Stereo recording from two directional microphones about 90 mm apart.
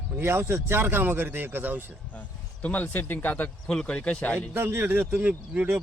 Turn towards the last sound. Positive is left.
turn(degrees=-20)  # may be behind; listen again after turning